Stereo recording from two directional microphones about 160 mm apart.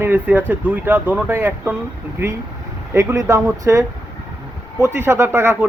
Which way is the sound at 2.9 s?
20° right (ahead or behind).